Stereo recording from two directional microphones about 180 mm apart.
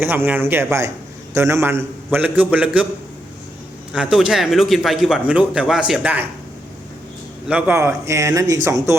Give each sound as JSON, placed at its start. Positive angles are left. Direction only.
{"t": 0.0, "sound": "a man's voice", "side_deg": -10}
{"t": 3.9, "sound": "a man's voice", "side_deg": -5}
{"t": 7.4, "sound": "a man's voice", "side_deg": -10}